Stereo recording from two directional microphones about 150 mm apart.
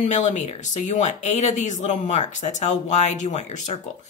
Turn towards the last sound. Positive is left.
turn(degrees=50)  # may be behind; listen again after turning